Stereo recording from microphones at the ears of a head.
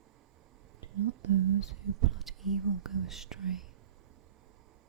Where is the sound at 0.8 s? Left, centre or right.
Right.